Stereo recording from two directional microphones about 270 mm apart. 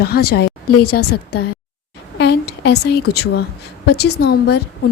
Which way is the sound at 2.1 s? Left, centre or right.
Left.